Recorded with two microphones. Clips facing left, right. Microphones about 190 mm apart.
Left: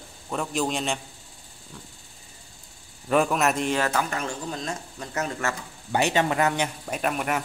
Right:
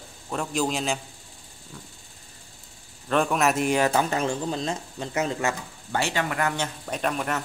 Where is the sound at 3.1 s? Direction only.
5° left (ahead or behind); by 5.5 s 20° right (ahead or behind).